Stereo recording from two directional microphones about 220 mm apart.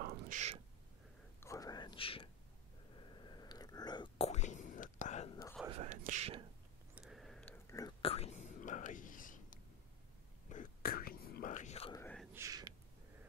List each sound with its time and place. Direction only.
0.0 s a sound: 45° right (ahead or behind)
1.4 s whispering: 15° left (ahead or behind); by 5.3 s 35° left (ahead or behind)
5.7 s whispering: 30° right (ahead or behind)
7.0 s whispering: centre (ahead or behind); by 11.9 s 30° left (ahead or behind)
11.9 s whispering: 10° left (ahead or behind)
12.4 s a sound: 15° right (ahead or behind)